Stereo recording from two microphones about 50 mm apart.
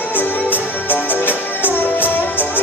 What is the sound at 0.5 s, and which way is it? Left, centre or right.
Music, left.